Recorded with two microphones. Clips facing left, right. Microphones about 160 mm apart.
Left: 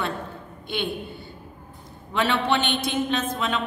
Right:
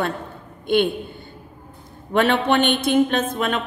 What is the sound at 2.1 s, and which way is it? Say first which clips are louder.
A woman's voice: right 5 dB; 55° right (ahead or behind).